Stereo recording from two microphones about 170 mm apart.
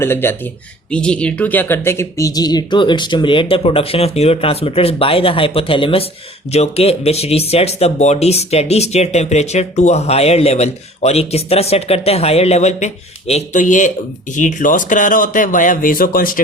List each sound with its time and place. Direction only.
0.0 s speech: 15° left (ahead or behind); by 16.4 s 55° left (ahead or behind)